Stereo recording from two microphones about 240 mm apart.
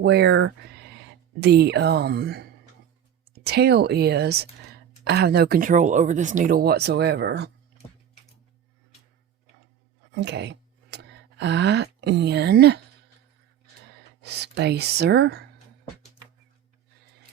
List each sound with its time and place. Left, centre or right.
0.0 s speech: right
10.2 s speech: right
14.2 s speech: right